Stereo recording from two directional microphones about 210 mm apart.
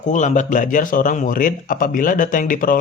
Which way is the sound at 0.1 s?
35° left (ahead or behind).